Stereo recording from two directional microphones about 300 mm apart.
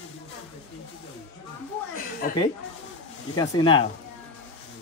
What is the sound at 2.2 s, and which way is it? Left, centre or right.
Speech, left.